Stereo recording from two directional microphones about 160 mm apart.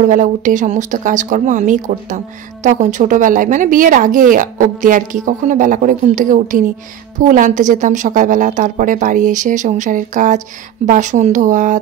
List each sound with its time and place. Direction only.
0.0 s speech: 55° right (ahead or behind)